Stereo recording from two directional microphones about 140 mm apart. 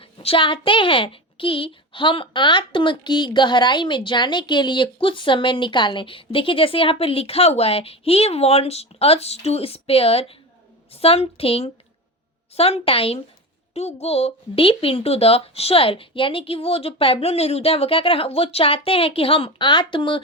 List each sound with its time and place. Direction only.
0.0 s a child's voice: 40° left (ahead or behind)